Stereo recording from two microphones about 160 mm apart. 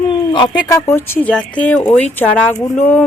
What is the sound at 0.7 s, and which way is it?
Speech, 15° left (ahead or behind).